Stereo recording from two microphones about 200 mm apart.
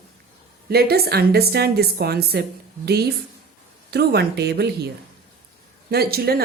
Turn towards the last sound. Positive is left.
turn(degrees=-50)  # may be behind; listen again after turning